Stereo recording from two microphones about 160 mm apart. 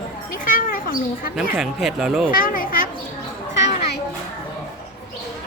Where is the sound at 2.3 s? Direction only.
60° left (ahead or behind).